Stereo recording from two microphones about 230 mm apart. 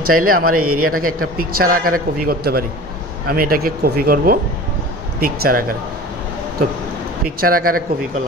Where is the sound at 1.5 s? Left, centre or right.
Right.